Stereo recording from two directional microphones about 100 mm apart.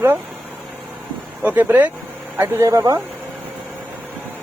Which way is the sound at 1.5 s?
20° right (ahead or behind).